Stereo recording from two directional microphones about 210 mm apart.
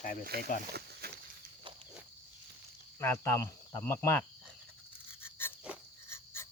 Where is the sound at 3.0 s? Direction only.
10° left (ahead or behind).